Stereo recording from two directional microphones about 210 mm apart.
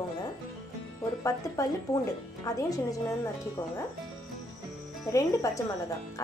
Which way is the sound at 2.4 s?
15° left (ahead or behind).